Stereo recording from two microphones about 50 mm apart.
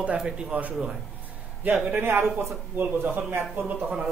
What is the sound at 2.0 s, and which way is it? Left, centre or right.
A man's voice, right.